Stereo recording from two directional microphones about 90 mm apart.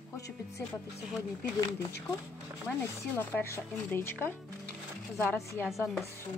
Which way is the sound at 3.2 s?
25° left (ahead or behind).